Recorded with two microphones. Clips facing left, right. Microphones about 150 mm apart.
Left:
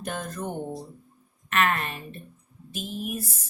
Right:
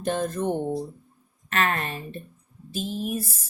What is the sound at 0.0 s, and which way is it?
A woman's voice, 30° right (ahead or behind).